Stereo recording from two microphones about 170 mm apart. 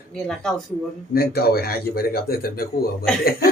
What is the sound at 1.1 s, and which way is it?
A man's voice, 65° left (ahead or behind).